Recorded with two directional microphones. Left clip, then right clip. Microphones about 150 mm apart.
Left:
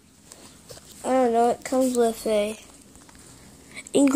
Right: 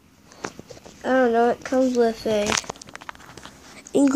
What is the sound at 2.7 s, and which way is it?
Walk, 30° right (ahead or behind).